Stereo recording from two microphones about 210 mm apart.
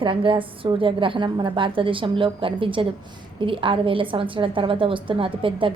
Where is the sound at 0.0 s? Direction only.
25° right (ahead or behind).